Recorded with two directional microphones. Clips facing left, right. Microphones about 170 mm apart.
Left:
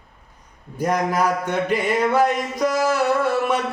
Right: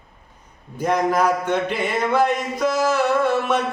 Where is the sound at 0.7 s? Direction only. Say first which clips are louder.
Right 1 dB; 10° left (ahead or behind).